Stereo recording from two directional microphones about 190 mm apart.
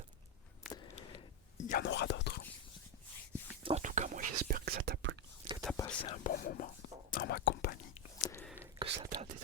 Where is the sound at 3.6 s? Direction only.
35° right (ahead or behind); by 5.1 s 60° right (ahead or behind).